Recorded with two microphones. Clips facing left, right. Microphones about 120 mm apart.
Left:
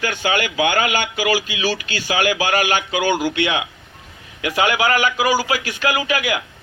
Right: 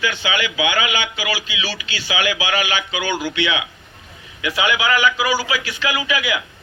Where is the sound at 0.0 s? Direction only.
45° left (ahead or behind).